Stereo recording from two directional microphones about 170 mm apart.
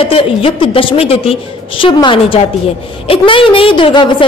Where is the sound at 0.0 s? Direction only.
35° left (ahead or behind).